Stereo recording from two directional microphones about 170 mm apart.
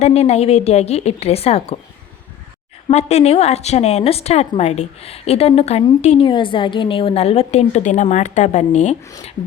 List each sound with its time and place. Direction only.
0.0 s a woman's voice: 40° left (ahead or behind)
2.9 s a woman's voice: 40° left (ahead or behind)